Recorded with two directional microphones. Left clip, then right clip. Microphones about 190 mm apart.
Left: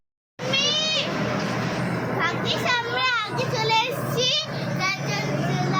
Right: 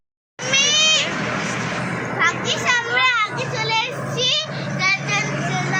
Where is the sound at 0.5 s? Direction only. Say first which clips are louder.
Right 7 dB; 20° left (ahead or behind).